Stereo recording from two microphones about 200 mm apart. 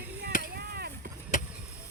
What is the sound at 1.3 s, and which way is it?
Vehicle, 40° left (ahead or behind).